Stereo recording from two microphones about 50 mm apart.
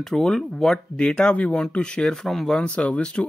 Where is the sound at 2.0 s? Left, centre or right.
Centre.